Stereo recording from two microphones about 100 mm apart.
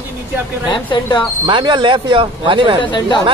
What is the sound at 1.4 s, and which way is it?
Speech, 50° right (ahead or behind).